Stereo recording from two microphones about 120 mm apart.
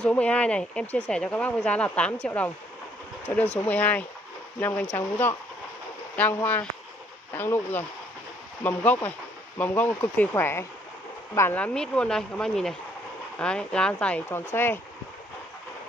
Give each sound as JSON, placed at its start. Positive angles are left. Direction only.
{"t": 0.0, "sound": "speech", "side_deg": 10}
{"t": 3.5, "sound": "speech", "side_deg": 15}